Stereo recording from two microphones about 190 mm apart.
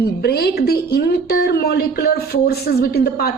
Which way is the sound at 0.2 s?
55° left (ahead or behind).